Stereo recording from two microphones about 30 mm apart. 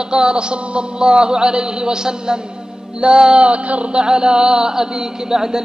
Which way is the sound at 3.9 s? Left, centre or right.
Right.